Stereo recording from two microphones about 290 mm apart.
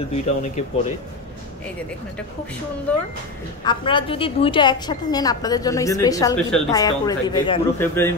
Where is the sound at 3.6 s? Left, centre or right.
Centre.